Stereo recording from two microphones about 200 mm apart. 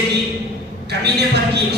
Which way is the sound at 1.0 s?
55° right (ahead or behind).